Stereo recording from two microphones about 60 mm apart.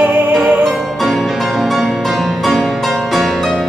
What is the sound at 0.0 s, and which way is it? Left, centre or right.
Music, right.